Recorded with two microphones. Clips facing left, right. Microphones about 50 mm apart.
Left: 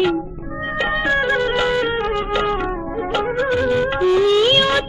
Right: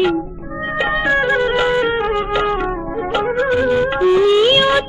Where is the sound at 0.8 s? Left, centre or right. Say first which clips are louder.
Right 2 dB; centre.